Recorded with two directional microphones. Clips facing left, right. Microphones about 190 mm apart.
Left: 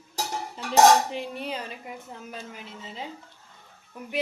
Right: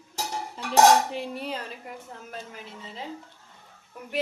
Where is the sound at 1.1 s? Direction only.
Centre (ahead or behind).